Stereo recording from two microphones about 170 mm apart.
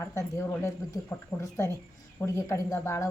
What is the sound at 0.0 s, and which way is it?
A woman's voice, 15° left (ahead or behind).